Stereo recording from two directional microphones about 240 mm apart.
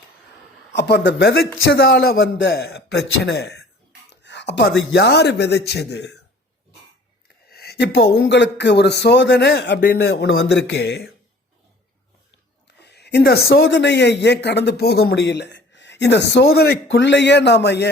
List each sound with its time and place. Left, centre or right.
0.7 s a man's voice: left
4.2 s a sound: left
4.9 s a man's voice: left
7.5 s a man's voice: left
12.8 s a man's voice: left